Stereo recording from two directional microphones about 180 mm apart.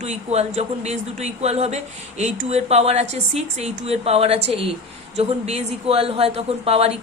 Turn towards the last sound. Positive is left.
turn(degrees=-35)  # may be behind; listen again after turning